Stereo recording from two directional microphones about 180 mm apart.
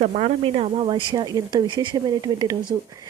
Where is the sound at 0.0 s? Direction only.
40° right (ahead or behind).